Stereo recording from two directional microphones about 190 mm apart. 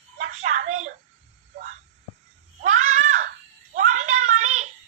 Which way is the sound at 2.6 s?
40° right (ahead or behind).